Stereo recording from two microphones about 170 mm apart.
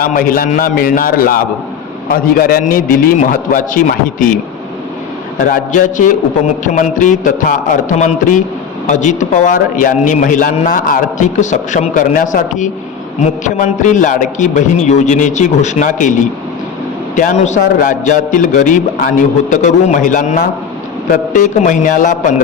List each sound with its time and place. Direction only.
0.0 s a man's voice: 55° left (ahead or behind)
2.4 s a man's voice: 60° left (ahead or behind)
5.4 s a man's voice: 50° left (ahead or behind)
17.2 s a man's voice: 45° left (ahead or behind)